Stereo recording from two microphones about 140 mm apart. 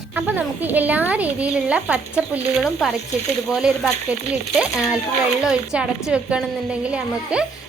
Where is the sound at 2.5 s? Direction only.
Centre (ahead or behind).